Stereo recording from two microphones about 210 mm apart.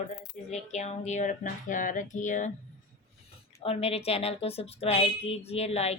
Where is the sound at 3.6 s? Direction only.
30° left (ahead or behind).